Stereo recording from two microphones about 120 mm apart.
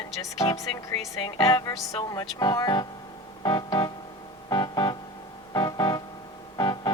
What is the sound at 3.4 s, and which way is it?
Keyboard, 30° left (ahead or behind).